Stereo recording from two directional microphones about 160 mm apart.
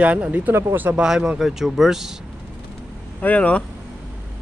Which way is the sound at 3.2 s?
10° left (ahead or behind).